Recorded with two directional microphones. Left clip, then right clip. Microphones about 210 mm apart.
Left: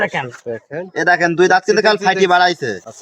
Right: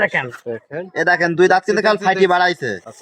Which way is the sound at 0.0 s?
5° left (ahead or behind).